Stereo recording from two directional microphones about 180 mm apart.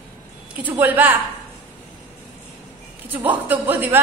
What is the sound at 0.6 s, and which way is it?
Speech, 10° right (ahead or behind).